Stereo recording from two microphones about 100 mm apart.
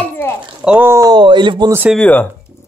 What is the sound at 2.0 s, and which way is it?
Speech, 20° left (ahead or behind).